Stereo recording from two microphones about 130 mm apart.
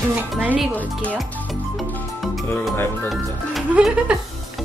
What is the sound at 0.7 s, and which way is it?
Speech, 10° left (ahead or behind).